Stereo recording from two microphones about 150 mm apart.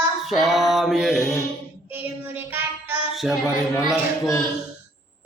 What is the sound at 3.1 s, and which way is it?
Speech, centre (ahead or behind).